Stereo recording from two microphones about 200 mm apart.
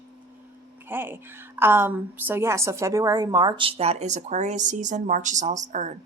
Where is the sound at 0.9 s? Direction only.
10° right (ahead or behind).